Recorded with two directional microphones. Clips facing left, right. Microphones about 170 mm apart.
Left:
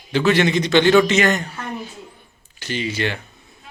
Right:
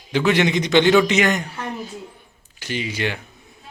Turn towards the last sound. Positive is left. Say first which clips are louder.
# left 1 dB
turn(degrees=-10)  # may be behind; listen again after turning